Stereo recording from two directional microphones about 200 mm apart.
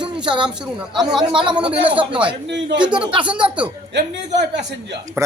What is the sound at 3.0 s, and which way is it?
Speech, 25° right (ahead or behind).